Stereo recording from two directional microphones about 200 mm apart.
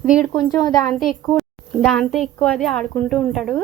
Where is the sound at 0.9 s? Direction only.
Centre (ahead or behind).